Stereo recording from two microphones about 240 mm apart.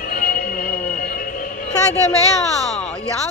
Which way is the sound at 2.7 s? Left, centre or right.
Centre.